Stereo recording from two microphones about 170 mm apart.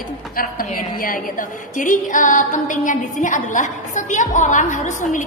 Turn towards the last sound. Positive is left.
turn(degrees=50)  # may be behind; listen again after turning